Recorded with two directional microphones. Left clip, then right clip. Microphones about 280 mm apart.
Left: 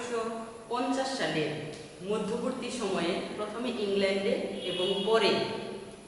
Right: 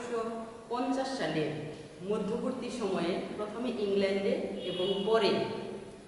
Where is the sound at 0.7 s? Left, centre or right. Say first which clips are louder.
Left 2 dB; centre.